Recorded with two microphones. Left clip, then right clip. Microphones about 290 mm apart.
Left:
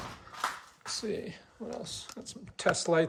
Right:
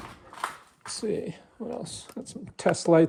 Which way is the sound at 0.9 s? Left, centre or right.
Right.